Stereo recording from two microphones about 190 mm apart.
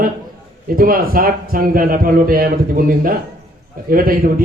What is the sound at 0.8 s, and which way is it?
A man's voice, 50° right (ahead or behind).